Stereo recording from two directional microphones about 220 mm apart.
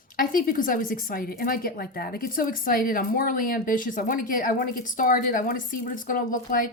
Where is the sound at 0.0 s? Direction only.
40° left (ahead or behind).